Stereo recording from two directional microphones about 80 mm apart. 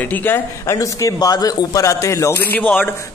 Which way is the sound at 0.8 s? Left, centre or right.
Left.